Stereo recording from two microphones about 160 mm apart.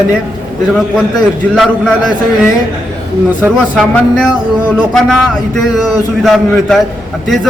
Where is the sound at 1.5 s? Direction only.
Centre (ahead or behind).